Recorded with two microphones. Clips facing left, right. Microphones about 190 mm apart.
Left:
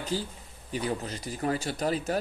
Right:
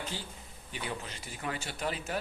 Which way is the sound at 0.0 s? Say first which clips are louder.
Left 8 dB; 40° left (ahead or behind).